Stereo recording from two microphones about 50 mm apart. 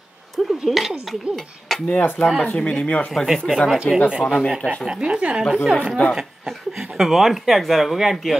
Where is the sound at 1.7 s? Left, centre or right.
Centre.